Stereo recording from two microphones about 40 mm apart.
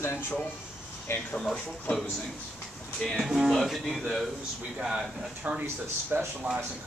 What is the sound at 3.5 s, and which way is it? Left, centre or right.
Speech, centre.